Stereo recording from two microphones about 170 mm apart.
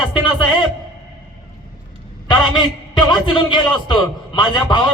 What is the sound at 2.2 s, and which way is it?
A man's voice, 25° left (ahead or behind).